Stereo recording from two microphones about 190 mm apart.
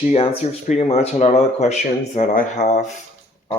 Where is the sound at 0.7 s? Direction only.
35° left (ahead or behind).